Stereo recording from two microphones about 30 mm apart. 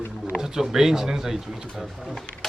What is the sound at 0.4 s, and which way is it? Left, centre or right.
Speech, centre.